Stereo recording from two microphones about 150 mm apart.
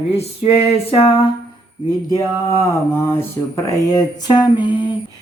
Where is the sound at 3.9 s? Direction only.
25° left (ahead or behind).